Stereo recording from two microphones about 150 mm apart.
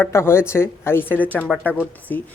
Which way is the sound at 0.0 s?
15° left (ahead or behind).